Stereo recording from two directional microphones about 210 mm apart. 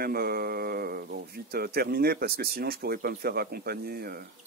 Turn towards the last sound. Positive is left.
turn(degrees=-45)  # may be behind; listen again after turning